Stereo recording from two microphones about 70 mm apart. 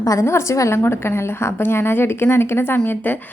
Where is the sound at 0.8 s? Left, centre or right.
Left.